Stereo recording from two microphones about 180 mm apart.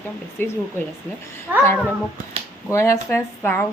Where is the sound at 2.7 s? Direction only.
15° left (ahead or behind).